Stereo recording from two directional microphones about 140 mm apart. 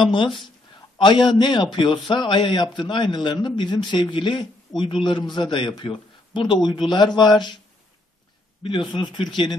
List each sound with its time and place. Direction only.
0.0 s a man's voice: 35° left (ahead or behind)
9.1 s a man's voice: 35° left (ahead or behind)